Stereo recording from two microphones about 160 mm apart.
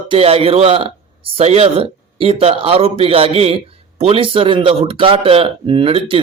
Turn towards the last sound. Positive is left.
turn(degrees=-35)  # may be behind; listen again after turning